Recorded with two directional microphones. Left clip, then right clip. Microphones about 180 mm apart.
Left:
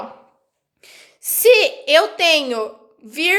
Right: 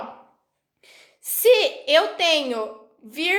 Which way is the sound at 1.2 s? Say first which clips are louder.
Left 4 dB; 30° left (ahead or behind).